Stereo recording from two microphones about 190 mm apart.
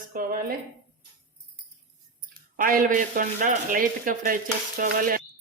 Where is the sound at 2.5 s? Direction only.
45° right (ahead or behind).